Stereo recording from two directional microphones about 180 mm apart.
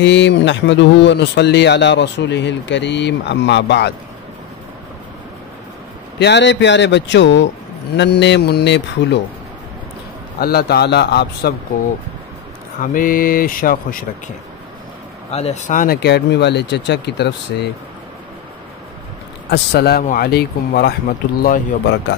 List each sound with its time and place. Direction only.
0.0 s speech: 85° left
6.1 s speech: 70° left (ahead or behind)
7.9 s speech: 70° left (ahead or behind)
10.4 s speech: 60° left (ahead or behind)
12.8 s speech: 50° left (ahead or behind)
15.3 s speech: 40° left (ahead or behind)
16.0 s speech: 65° left (ahead or behind)
19.5 s speech: 65° left (ahead or behind)